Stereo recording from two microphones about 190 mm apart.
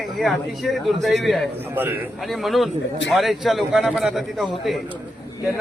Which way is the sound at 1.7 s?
10° right (ahead or behind).